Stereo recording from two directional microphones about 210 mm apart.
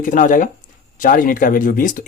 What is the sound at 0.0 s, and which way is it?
Speech, 40° left (ahead or behind).